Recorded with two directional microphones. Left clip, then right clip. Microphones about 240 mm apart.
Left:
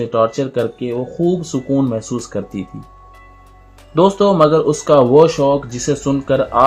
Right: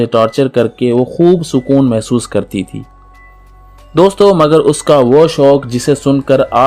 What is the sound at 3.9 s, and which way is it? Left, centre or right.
Speech, right.